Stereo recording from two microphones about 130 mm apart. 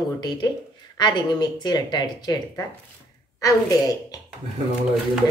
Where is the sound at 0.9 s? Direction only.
35° left (ahead or behind).